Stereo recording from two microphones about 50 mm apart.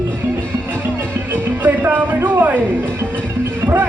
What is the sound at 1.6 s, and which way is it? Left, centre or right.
Music, right.